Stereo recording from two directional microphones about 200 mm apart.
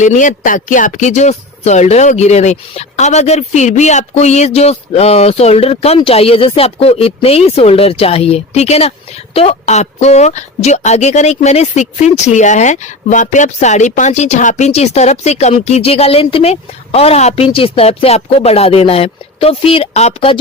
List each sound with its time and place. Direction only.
0.0 s speech: 40° left (ahead or behind)